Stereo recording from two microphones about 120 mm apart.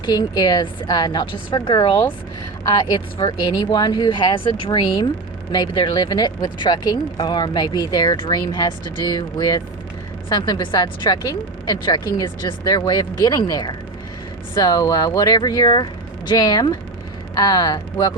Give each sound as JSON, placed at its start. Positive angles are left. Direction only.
{"t": 0.0, "sound": "speech", "side_deg": 35}